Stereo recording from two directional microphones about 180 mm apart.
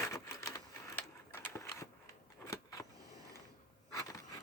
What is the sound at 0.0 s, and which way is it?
Typewriter, 15° left (ahead or behind).